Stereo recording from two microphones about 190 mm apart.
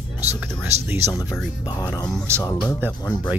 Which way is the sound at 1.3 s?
5° right (ahead or behind).